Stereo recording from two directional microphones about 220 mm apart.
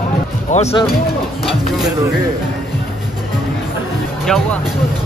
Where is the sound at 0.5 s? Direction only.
30° left (ahead or behind).